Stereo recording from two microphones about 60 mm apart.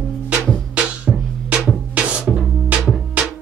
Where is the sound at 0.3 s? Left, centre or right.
Right.